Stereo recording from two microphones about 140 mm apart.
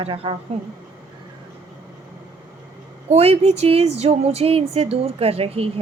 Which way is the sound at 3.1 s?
50° right (ahead or behind).